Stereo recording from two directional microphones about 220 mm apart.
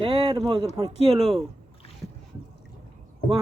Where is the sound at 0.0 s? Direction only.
25° right (ahead or behind).